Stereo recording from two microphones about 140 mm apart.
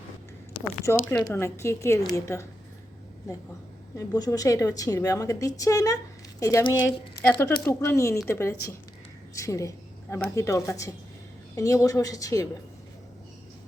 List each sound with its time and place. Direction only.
0.9 s a woman's voice: 15° left (ahead or behind)